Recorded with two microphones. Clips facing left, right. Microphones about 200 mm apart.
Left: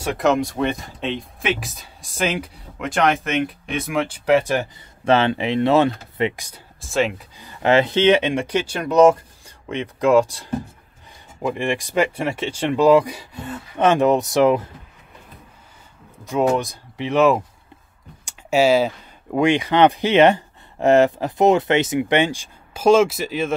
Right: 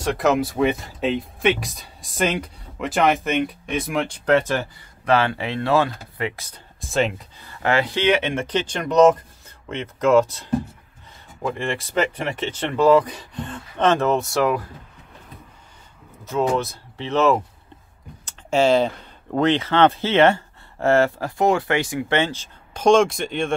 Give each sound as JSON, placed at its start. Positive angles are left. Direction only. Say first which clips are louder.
{"t": 0.0, "sound": "speech", "louder": "left 1 dB", "side_deg": 0}
{"t": 6.8, "sound": "speech", "louder": "left 1 dB", "side_deg": 0}
{"t": 7.3, "sound": "speech", "louder": "left 5 dB", "side_deg": 20}
{"t": 16.3, "sound": "speech", "louder": "left 2 dB", "side_deg": 15}
{"t": 18.2, "sound": "typing", "louder": "left 2 dB", "side_deg": 10}
{"t": 19.3, "sound": "speech", "louder": "left 2 dB", "side_deg": 10}